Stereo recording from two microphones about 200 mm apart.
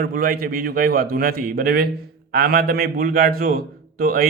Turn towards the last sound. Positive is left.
turn(degrees=-45)  # may be behind; listen again after turning